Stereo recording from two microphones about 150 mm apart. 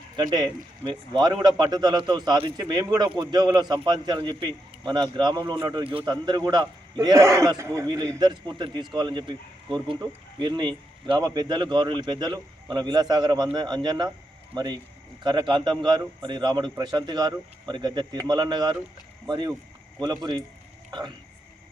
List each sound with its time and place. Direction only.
0.2 s speech: 30° right (ahead or behind)